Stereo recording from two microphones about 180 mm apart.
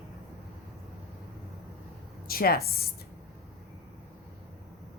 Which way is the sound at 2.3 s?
55° left (ahead or behind).